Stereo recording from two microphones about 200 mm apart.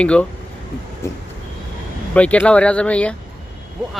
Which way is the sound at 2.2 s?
5° left (ahead or behind).